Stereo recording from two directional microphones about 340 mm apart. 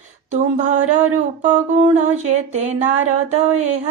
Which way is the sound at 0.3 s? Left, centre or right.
Right.